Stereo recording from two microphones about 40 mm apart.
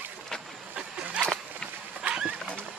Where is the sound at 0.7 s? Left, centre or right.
Right.